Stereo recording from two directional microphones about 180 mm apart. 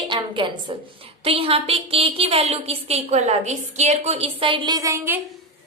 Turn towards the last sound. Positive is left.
turn(degrees=-15)  # may be behind; listen again after turning